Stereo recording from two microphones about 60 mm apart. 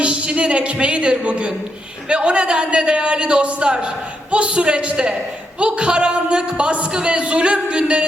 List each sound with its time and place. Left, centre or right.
0.0 s a man's voice: centre